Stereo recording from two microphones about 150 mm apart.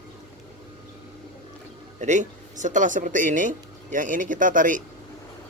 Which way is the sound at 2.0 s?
55° right (ahead or behind).